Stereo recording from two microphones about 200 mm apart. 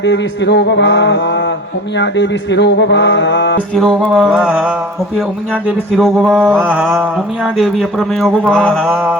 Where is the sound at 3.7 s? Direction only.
Centre (ahead or behind).